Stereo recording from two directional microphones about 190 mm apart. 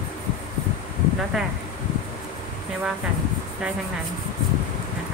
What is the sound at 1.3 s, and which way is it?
Speech, centre (ahead or behind).